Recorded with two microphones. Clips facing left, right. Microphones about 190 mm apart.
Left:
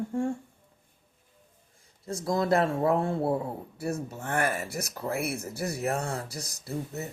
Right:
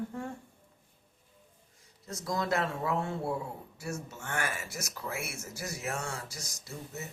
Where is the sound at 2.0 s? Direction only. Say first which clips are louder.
Left 6 dB; 30° left (ahead or behind).